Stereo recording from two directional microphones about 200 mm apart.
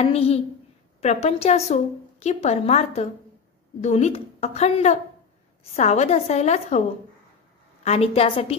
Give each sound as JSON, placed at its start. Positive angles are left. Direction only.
{"t": 0.0, "sound": "a woman's voice", "side_deg": 30}
{"t": 7.8, "sound": "a woman's voice", "side_deg": 30}